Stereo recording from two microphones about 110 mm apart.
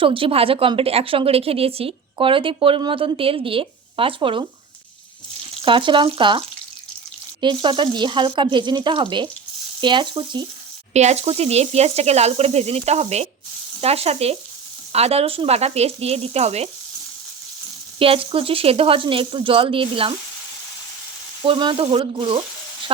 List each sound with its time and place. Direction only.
0.0 s a woman's voice: 55° right (ahead or behind)
5.6 s speech: 50° right (ahead or behind)
7.4 s speech: 45° right (ahead or behind)
10.9 s speech: 85° right
13.8 s speech: 65° right (ahead or behind)
18.0 s a woman's voice: 55° right (ahead or behind)
21.4 s sizzle: 50° right (ahead or behind)